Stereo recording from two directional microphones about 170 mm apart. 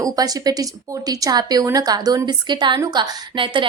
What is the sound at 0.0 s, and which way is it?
Speech, 20° right (ahead or behind).